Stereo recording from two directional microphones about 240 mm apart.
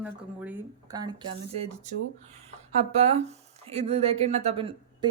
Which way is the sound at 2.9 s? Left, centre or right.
Right.